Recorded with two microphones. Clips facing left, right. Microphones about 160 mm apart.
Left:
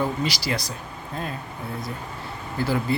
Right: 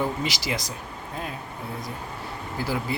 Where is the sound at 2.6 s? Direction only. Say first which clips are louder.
Left 4 dB; 10° right (ahead or behind).